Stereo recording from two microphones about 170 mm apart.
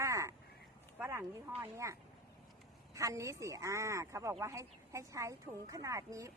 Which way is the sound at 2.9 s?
20° right (ahead or behind).